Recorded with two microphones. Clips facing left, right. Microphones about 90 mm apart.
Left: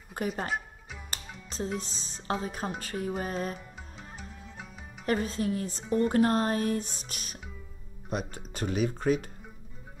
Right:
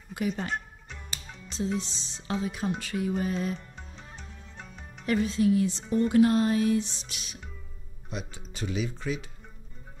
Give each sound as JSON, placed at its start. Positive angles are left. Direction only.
{"t": 0.2, "sound": "a woman's voice", "side_deg": 45}
{"t": 0.5, "sound": "music", "side_deg": 5}
{"t": 1.8, "sound": "a woman's voice", "side_deg": 40}
{"t": 2.8, "sound": "music", "side_deg": 40}
{"t": 3.2, "sound": "a woman's voice", "side_deg": 40}
{"t": 3.5, "sound": "music", "side_deg": 5}
{"t": 5.0, "sound": "a woman's voice", "side_deg": 40}